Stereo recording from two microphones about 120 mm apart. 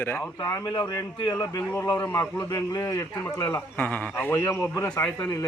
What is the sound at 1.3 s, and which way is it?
A man's voice, 30° left (ahead or behind).